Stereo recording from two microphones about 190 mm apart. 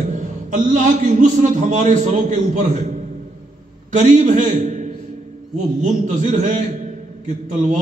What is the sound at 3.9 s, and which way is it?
A man's voice, 40° right (ahead or behind).